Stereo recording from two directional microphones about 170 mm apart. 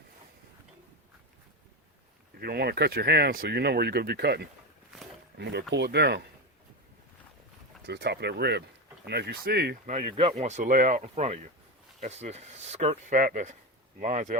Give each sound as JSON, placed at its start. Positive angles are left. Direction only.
{"t": 2.4, "sound": "speech", "side_deg": -70}
{"t": 5.4, "sound": "speech", "side_deg": -90}
{"t": 7.9, "sound": "speech", "side_deg": -80}
{"t": 9.9, "sound": "speech", "side_deg": -35}